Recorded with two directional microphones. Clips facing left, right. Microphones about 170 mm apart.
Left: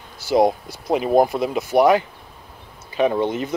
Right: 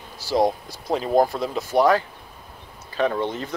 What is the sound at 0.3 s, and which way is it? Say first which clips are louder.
Speech: left 4 dB; 20° left (ahead or behind).